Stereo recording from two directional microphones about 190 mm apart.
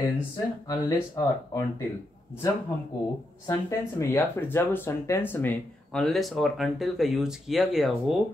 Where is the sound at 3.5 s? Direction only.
15° left (ahead or behind); by 8.1 s centre (ahead or behind).